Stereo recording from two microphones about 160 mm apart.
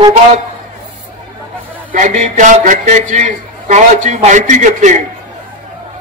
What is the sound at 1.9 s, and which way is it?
A man's voice, 50° right (ahead or behind).